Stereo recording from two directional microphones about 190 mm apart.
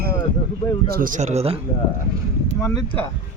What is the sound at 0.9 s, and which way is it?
Speech, 45° right (ahead or behind).